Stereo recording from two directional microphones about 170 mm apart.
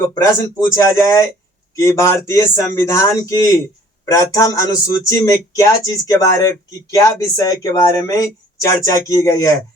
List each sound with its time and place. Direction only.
0.1 s a man's voice: 15° left (ahead or behind)